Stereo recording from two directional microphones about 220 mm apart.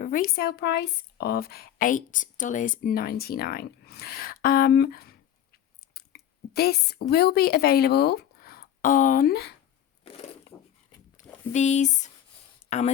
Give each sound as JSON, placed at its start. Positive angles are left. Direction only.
{"t": 0.0, "sound": "speech", "side_deg": 40}
{"t": 11.5, "sound": "speech", "side_deg": 30}